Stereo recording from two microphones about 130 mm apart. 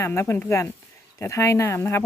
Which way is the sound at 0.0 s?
20° left (ahead or behind).